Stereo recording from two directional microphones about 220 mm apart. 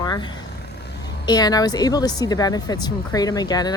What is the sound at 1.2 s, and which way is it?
Speech, 15° left (ahead or behind).